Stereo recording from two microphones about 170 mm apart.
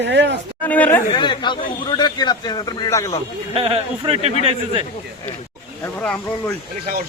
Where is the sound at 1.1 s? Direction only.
25° left (ahead or behind).